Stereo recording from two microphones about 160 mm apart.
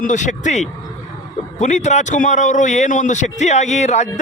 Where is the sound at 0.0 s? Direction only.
50° left (ahead or behind).